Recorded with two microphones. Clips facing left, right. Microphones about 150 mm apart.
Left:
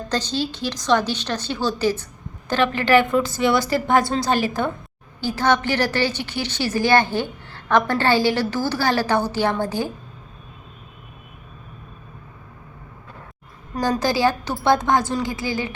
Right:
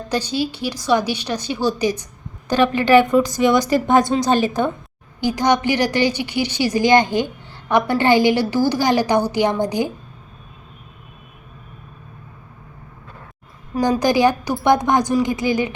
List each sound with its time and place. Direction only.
0.1 s a woman's voice: 10° right (ahead or behind)
13.7 s a woman's voice: 10° right (ahead or behind)